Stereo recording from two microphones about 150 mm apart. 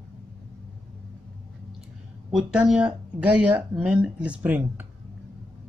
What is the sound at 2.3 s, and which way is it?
Speech, 5° right (ahead or behind).